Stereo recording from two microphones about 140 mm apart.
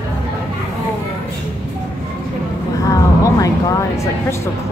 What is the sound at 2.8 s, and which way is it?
Vehicle, 25° left (ahead or behind).